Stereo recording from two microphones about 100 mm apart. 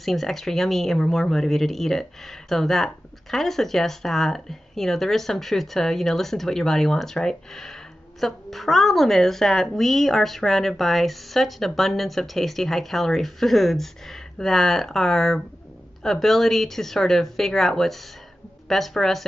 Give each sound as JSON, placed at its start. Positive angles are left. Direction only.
{"t": 0.0, "sound": "speech", "side_deg": 0}